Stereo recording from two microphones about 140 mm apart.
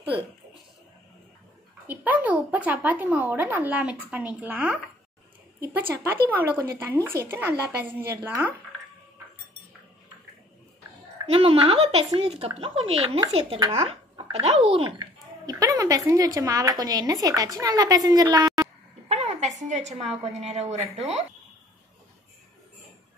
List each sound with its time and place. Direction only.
1.9 s a woman's voice: 10° right (ahead or behind)
11.2 s speech: 45° right (ahead or behind)
15.0 s a woman's voice: 25° right (ahead or behind)
19.0 s a sound: 50° right (ahead or behind)
20.3 s speech: 50° right (ahead or behind)